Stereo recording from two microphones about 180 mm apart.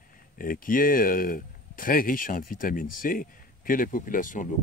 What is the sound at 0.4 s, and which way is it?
Speech, 50° left (ahead or behind).